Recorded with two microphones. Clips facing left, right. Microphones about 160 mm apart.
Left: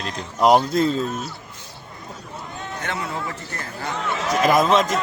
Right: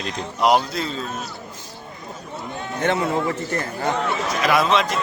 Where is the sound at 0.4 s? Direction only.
45° left (ahead or behind).